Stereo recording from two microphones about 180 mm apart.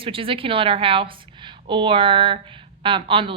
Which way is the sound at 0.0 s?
30° right (ahead or behind).